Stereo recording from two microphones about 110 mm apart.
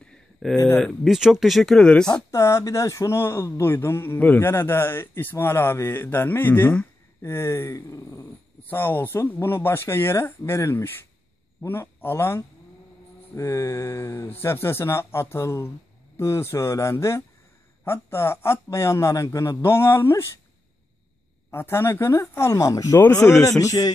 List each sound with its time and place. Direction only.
0.0 s a sound: 5° left (ahead or behind)
0.6 s speech: 20° left (ahead or behind)
0.8 s speech: centre (ahead or behind)
2.3 s speech: 30° left (ahead or behind)
8.6 s speech: 20° left (ahead or behind)
21.5 s speech: 20° left (ahead or behind)
23.6 s music: 30° left (ahead or behind)